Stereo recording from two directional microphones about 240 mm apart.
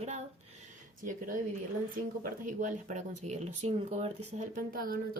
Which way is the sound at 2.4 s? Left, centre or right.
Right.